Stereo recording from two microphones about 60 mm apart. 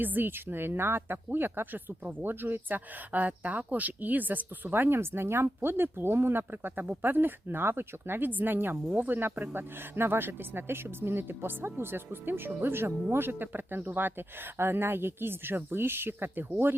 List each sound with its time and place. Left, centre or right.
0.0 s speech: right